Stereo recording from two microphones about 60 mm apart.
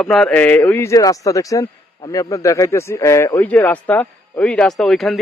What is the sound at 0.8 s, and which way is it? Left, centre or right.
Speech, left.